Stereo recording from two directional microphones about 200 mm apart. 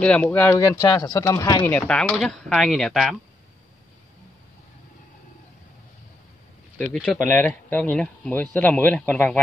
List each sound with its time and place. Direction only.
0.0 s speech: 5° left (ahead or behind)
1.8 s speech: 5° left (ahead or behind)
6.9 s speech: centre (ahead or behind)